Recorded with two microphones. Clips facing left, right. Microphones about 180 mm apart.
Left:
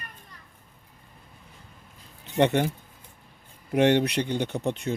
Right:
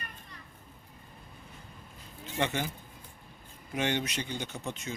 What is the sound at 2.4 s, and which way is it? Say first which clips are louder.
Speech: left 10 dB; 65° left (ahead or behind).